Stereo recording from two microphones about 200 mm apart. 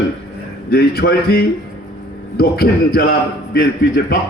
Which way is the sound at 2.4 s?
50° left (ahead or behind).